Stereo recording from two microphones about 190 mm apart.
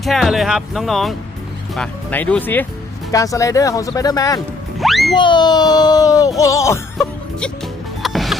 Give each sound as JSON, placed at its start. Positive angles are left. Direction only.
{"t": 0.0, "sound": "speech", "side_deg": 0}
{"t": 4.8, "sound": "music", "side_deg": 0}
{"t": 5.1, "sound": "speech", "side_deg": 25}
{"t": 8.0, "sound": "music", "side_deg": 0}